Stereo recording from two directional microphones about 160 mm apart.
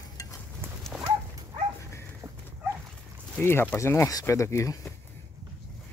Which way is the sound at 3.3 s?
10° left (ahead or behind).